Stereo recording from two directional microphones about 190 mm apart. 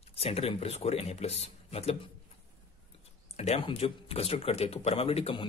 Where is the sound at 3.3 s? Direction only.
35° left (ahead or behind).